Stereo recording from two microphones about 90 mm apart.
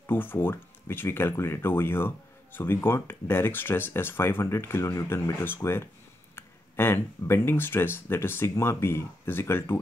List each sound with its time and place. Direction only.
0.0 s speech: 25° left (ahead or behind)